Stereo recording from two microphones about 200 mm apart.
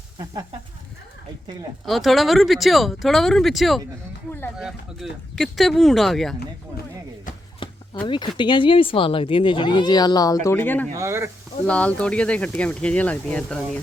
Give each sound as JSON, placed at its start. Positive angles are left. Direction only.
{"t": 1.8, "sound": "speech", "side_deg": 0}
{"t": 7.6, "sound": "a sound", "side_deg": 25}
{"t": 8.0, "sound": "speech", "side_deg": 25}
{"t": 10.9, "sound": "speech", "side_deg": -15}
{"t": 11.6, "sound": "speech", "side_deg": 5}